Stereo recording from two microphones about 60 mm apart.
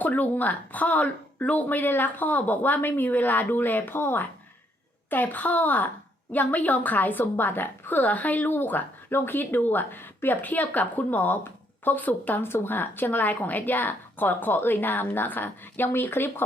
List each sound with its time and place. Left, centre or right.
0.0 s a woman's voice: left